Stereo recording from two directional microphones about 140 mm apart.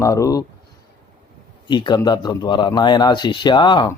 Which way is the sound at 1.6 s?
35° left (ahead or behind).